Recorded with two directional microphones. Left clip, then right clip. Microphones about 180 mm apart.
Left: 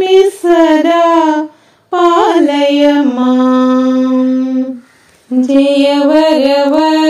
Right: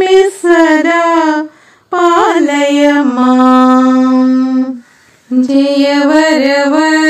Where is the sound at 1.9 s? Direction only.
10° right (ahead or behind).